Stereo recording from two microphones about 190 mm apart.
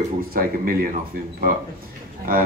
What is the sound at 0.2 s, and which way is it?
Speech, 50° right (ahead or behind).